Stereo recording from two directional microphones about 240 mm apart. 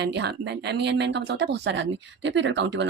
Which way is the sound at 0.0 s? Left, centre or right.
Right.